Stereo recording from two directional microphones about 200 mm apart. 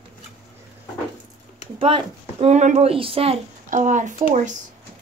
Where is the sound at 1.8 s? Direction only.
25° right (ahead or behind).